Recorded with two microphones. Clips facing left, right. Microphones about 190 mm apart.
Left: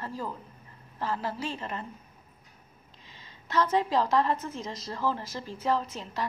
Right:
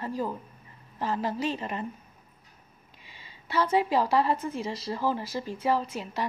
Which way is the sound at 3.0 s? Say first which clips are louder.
Even; 10° right (ahead or behind).